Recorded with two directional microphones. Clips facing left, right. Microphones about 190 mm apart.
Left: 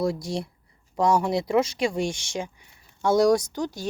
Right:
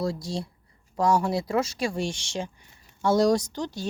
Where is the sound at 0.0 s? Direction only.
20° left (ahead or behind).